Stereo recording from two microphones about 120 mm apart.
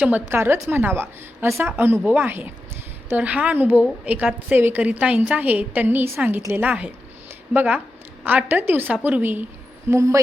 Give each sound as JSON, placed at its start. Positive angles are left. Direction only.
{"t": 0.0, "sound": "a woman's voice", "side_deg": -15}